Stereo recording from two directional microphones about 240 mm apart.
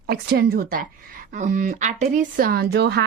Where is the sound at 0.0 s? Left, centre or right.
Right.